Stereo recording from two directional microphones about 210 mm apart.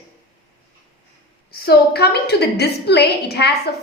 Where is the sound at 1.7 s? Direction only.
50° left (ahead or behind).